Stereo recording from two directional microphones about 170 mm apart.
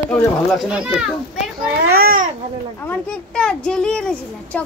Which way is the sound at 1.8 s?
65° right (ahead or behind).